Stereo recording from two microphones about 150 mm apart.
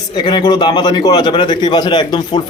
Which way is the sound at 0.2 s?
30° left (ahead or behind).